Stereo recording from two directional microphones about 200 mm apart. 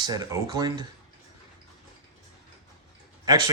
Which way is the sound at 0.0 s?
20° right (ahead or behind).